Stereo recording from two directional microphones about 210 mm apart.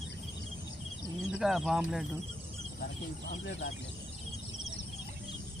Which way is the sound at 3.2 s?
60° left (ahead or behind).